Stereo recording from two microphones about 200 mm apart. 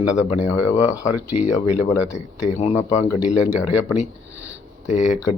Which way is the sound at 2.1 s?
35° left (ahead or behind).